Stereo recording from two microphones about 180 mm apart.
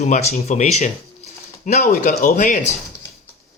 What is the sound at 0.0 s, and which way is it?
Speech, 40° left (ahead or behind).